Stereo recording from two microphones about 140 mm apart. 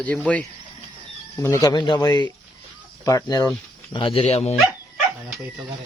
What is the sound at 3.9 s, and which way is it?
Speech, 40° left (ahead or behind).